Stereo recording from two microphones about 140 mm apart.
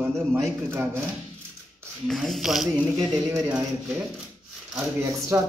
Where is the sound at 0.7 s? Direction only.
15° right (ahead or behind).